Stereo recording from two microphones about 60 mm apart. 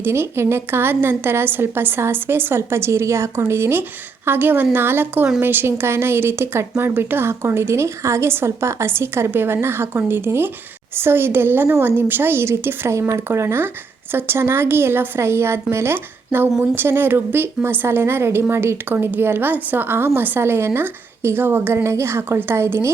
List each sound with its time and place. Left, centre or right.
0.0 s a woman's voice: right
13.0 s a woman's voice: right